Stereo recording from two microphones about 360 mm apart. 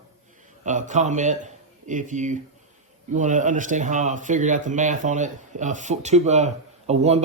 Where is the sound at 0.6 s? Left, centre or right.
Centre.